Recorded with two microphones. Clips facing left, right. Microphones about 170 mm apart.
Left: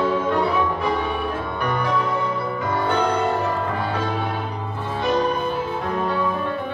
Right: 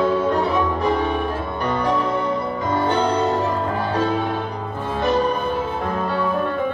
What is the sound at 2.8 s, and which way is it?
Music, 35° right (ahead or behind).